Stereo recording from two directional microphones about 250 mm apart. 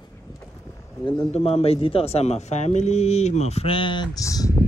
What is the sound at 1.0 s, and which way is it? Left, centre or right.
A man's voice, left.